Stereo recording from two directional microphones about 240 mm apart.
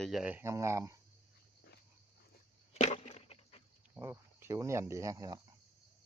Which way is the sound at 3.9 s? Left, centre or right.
Centre.